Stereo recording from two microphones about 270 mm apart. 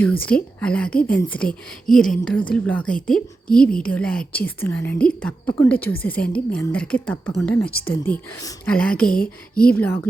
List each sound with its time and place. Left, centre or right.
0.0 s a woman's voice: centre
9.0 s speech: left
9.6 s speech: centre